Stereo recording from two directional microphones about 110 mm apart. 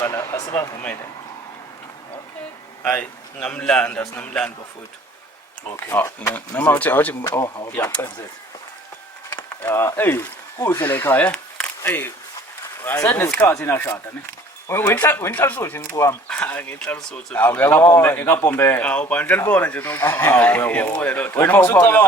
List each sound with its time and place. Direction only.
0.0 s speech: 25° left (ahead or behind)
2.8 s speech: 15° left (ahead or behind)
5.7 s speech: 20° left (ahead or behind)
9.3 s speech: 25° left (ahead or behind)
14.9 s speech: 20° left (ahead or behind)